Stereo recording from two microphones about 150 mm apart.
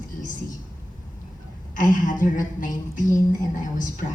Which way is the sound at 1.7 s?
60° left (ahead or behind).